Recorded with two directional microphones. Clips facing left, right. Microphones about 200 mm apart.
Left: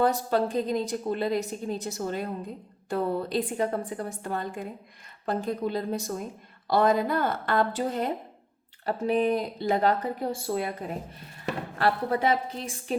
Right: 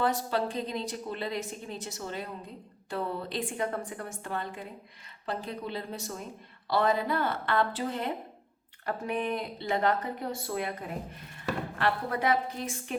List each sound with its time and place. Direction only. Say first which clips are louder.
0.0 s a woman's voice: left 5 dB; 45° left (ahead or behind)